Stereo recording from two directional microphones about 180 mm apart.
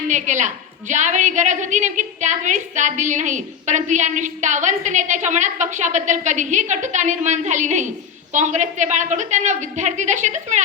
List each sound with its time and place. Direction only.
0.1 s a woman's voice: 45° right (ahead or behind)